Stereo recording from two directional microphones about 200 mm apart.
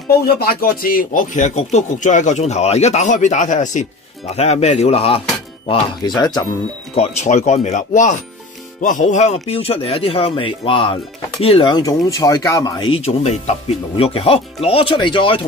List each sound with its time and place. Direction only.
0.4 s speech: 50° left (ahead or behind); by 6.4 s 20° left (ahead or behind)
7.0 s speech: 35° left (ahead or behind)